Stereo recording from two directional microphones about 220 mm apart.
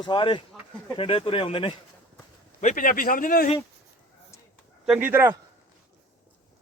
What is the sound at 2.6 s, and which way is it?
Speech, 35° left (ahead or behind).